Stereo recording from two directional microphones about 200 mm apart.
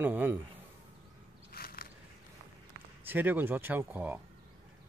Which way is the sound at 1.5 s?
45° left (ahead or behind).